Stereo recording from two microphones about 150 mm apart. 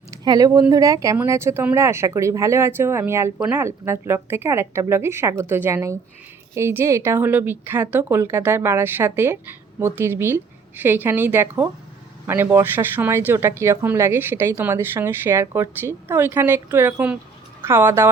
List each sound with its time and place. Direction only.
0.3 s speech: 25° right (ahead or behind)